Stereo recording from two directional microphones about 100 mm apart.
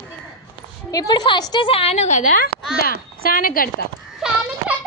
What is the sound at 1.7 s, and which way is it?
Speech, 70° left (ahead or behind).